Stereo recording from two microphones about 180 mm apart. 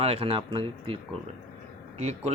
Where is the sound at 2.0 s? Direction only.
40° right (ahead or behind).